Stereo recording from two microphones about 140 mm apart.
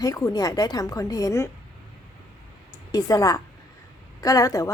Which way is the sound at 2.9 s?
25° left (ahead or behind).